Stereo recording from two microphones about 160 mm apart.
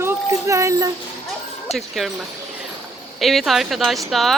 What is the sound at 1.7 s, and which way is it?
Speech, centre (ahead or behind).